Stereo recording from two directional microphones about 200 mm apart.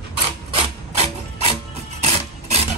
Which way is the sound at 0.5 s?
30° right (ahead or behind).